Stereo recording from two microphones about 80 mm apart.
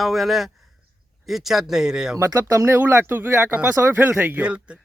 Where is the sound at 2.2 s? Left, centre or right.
Right.